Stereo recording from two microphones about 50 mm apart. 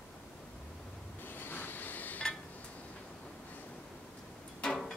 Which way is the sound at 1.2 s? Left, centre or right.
Left.